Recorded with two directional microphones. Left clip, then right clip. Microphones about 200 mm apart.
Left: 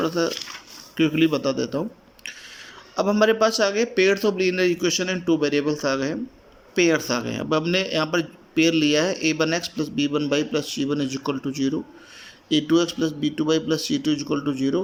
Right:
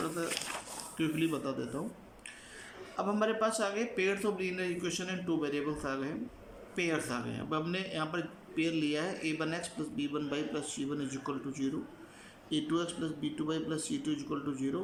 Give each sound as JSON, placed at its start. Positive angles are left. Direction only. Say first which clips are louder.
{"t": 0.9, "sound": "a man's voice", "louder": "left 13 dB", "side_deg": 45}
{"t": 2.9, "sound": "a man's voice", "louder": "left 13 dB", "side_deg": 45}